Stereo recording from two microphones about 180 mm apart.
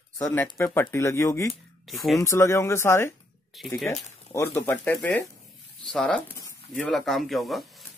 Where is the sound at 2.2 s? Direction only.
15° left (ahead or behind).